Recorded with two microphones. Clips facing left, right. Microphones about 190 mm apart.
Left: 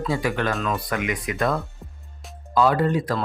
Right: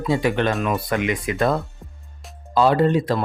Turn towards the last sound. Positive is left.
turn(degrees=-25)  # may be behind; listen again after turning